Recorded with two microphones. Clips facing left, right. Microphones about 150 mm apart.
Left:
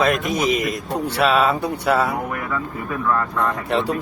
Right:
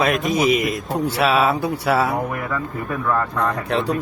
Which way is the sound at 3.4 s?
Centre (ahead or behind).